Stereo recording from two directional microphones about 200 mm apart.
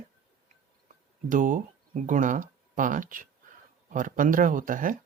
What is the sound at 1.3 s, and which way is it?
Speech, 40° right (ahead or behind).